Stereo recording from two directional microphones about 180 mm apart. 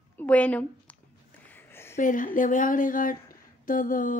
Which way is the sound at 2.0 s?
45° left (ahead or behind).